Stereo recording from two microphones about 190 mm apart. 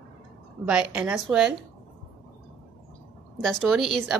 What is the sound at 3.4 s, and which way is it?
Speech, centre (ahead or behind).